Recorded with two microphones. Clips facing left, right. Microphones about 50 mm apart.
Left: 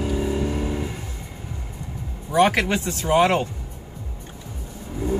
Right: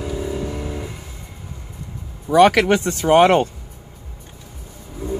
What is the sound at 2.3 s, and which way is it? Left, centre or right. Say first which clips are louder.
Speech: right 6 dB; right.